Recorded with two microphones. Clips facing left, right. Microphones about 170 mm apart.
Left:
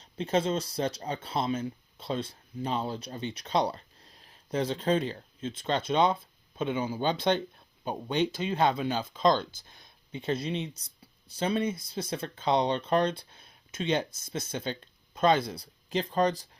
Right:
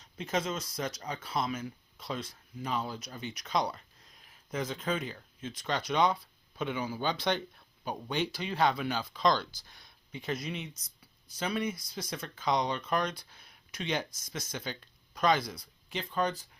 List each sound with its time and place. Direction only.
0.0 s speech: 30° left (ahead or behind)